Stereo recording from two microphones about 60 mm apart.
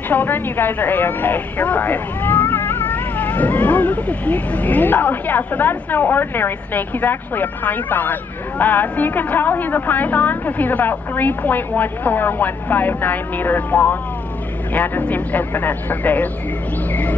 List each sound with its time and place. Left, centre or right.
0.1 s a woman's voice: left